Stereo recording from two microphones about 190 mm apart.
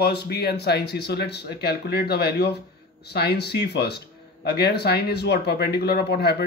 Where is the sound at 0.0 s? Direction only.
55° left (ahead or behind).